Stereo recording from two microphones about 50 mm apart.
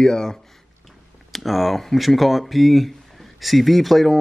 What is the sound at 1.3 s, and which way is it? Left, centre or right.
Speech, centre.